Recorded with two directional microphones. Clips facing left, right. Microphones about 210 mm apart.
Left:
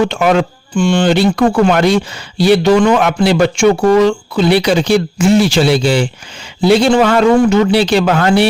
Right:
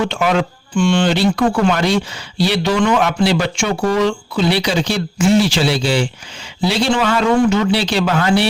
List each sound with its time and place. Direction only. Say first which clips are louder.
0.1 s speech: left 4 dB; 50° left (ahead or behind)